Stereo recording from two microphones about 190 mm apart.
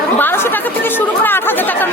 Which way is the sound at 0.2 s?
10° left (ahead or behind).